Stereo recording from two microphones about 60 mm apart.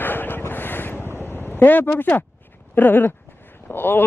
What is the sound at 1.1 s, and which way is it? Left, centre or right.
Vehicle, left.